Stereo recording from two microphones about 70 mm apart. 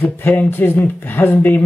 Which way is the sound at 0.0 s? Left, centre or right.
Left.